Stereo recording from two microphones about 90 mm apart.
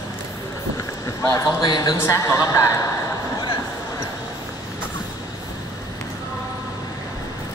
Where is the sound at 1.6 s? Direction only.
55° left (ahead or behind).